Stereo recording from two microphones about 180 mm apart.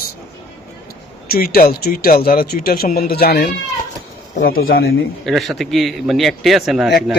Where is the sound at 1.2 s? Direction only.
55° left (ahead or behind).